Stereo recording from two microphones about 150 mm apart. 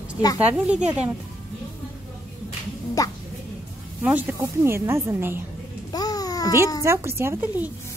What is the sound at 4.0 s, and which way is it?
A woman's voice, 10° right (ahead or behind).